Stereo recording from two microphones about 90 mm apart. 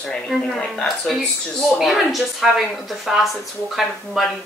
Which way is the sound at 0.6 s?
5° left (ahead or behind).